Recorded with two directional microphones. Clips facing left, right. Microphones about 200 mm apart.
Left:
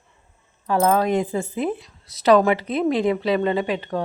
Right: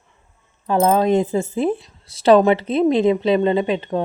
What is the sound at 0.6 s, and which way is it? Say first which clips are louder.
Speech: right 3 dB; 25° right (ahead or behind).